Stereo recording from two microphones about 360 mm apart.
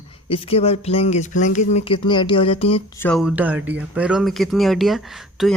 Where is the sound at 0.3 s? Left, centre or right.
Centre.